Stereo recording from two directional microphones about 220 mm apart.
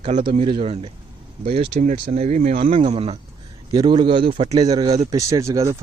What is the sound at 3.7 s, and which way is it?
Speech, 15° right (ahead or behind).